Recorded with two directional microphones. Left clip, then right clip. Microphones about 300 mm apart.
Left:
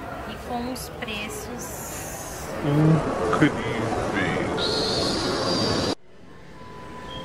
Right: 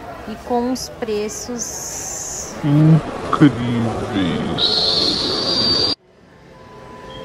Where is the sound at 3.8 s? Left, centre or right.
Left.